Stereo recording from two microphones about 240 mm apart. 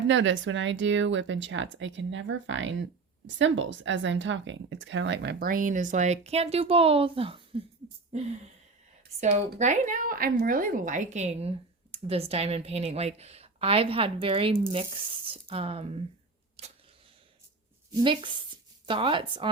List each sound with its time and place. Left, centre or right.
0.1 s speech: right
9.2 s speech: right
16.6 s a sound: right
17.9 s speech: centre